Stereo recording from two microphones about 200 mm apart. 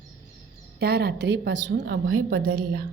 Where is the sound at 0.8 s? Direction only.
50° right (ahead or behind); by 2.2 s 75° right (ahead or behind).